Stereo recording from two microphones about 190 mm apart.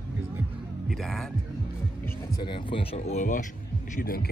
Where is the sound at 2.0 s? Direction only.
20° left (ahead or behind).